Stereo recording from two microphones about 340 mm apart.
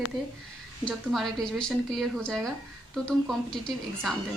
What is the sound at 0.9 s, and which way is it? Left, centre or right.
Speech, centre.